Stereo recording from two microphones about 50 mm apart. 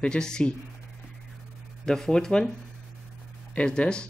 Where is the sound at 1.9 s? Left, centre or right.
Centre.